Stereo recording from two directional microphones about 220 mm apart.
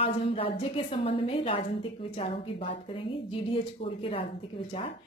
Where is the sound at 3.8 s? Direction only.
25° left (ahead or behind).